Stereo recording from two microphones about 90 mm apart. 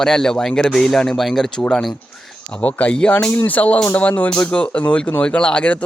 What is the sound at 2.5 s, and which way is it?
Speech, 15° left (ahead or behind).